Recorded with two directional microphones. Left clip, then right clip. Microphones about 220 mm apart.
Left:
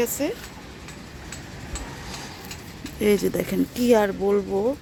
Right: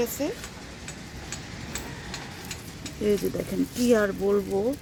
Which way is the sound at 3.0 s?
20° left (ahead or behind).